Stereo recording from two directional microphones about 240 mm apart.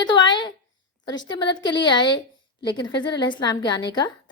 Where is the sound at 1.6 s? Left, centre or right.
Centre.